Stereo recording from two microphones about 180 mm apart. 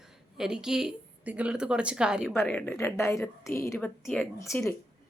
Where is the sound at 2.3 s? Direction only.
10° left (ahead or behind).